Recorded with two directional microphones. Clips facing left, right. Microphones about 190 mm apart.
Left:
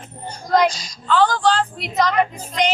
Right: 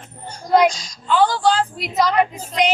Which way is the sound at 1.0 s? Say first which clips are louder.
Even; 10° right (ahead or behind).